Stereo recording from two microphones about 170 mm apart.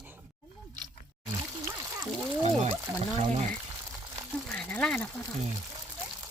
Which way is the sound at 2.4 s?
40° right (ahead or behind).